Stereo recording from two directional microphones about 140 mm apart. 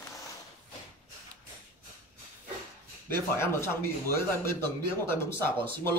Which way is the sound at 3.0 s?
15° left (ahead or behind).